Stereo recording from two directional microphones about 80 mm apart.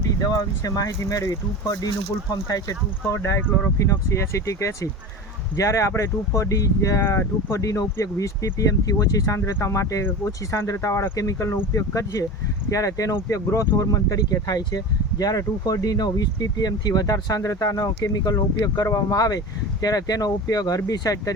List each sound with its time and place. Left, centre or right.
0.2 s speech: left
3.1 s speech: left
9.4 s speech: left